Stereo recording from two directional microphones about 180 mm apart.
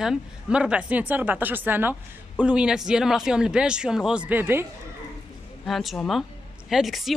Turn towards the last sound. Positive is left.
turn(degrees=0)  # may be behind; listen again after turning